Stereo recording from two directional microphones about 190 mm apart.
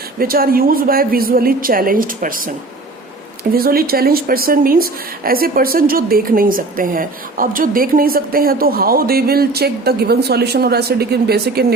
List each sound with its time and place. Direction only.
0.2 s speech: 50° right (ahead or behind)
3.5 s speech: 50° right (ahead or behind)